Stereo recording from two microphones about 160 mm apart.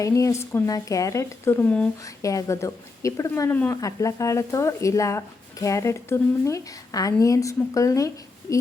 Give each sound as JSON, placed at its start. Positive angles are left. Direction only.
{"t": 0.0, "sound": "speech", "side_deg": 20}
{"t": 2.0, "sound": "a woman's voice", "side_deg": 20}